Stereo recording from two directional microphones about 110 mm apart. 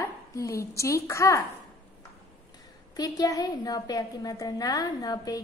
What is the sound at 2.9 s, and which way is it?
A woman's voice, 35° left (ahead or behind).